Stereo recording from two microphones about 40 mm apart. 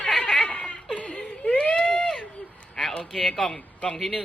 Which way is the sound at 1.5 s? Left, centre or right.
Left.